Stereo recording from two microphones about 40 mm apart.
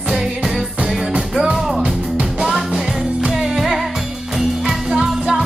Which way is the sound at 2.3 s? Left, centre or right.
Centre.